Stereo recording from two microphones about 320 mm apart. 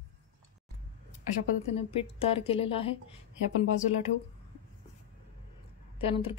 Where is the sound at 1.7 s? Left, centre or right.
Centre.